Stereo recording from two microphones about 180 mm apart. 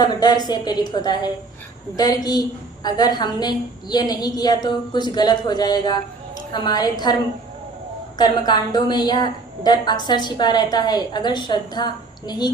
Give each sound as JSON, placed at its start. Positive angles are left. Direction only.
{"t": 0.0, "sound": "a woman's voice", "side_deg": 25}
{"t": 8.2, "sound": "a woman's voice", "side_deg": 25}